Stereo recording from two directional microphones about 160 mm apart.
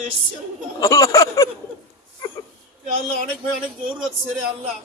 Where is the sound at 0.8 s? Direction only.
20° left (ahead or behind).